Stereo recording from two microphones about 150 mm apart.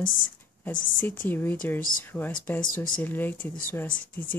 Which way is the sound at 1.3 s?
15° left (ahead or behind).